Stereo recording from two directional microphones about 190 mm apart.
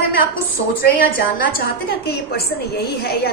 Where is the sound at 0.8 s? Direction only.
50° left (ahead or behind).